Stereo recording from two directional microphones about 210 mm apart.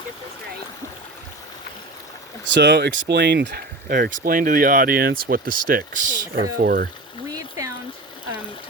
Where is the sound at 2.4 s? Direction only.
55° right (ahead or behind).